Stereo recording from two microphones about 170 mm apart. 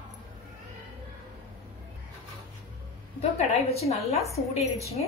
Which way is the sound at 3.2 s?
35° left (ahead or behind).